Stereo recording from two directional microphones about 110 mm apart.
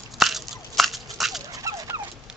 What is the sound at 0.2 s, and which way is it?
Biting, centre (ahead or behind).